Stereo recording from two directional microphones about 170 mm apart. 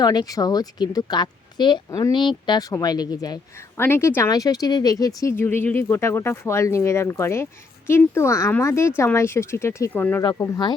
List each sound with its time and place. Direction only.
0.0 s a woman's voice: 25° left (ahead or behind)
3.8 s speech: 15° left (ahead or behind)
10.2 s a woman's voice: 20° left (ahead or behind)